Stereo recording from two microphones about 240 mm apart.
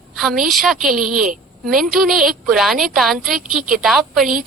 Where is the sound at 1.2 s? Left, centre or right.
Right.